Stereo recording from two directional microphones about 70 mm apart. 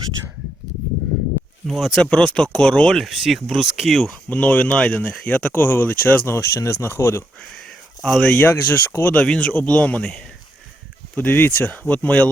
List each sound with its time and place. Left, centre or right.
1.6 s speech: centre
2.0 s speech: centre
4.3 s speech: centre; by 7.3 s left
8.0 s speech: centre
8.4 s speech: left
9.2 s speech: centre
11.1 s speech: left